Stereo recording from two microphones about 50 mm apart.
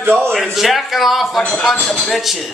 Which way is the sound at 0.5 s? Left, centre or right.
Centre.